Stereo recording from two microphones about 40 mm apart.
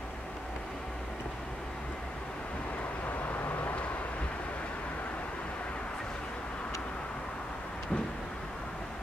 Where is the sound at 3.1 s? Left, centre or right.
Left.